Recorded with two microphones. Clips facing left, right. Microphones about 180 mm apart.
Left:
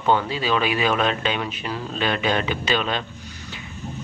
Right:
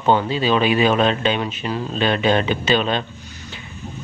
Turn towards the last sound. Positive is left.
turn(degrees=-30)  # may be behind; listen again after turning